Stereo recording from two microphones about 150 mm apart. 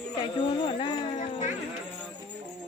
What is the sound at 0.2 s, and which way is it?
Speech, 35° left (ahead or behind).